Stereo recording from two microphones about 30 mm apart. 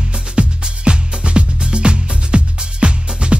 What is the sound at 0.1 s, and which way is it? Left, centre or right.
Music, right.